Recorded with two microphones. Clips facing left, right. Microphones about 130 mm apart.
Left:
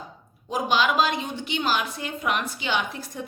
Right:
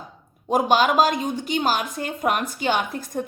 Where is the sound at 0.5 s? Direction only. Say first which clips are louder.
Right 4 dB; 45° right (ahead or behind).